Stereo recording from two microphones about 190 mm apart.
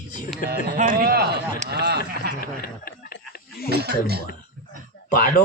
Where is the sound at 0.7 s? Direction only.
45° right (ahead or behind); by 2.3 s 60° right (ahead or behind).